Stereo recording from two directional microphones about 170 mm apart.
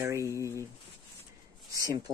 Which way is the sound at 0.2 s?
15° left (ahead or behind).